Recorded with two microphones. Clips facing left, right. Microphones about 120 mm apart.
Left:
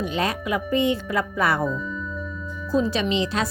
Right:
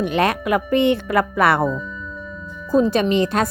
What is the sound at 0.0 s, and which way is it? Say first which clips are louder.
Speech: right 6 dB; 65° right (ahead or behind).